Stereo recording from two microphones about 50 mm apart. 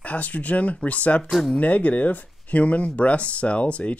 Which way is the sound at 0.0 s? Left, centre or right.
Left.